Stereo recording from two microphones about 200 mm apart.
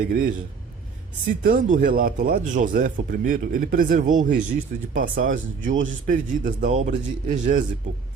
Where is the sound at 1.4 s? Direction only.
45° right (ahead or behind).